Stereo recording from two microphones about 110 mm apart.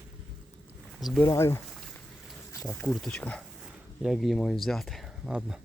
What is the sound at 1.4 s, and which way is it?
Speech, 25° left (ahead or behind).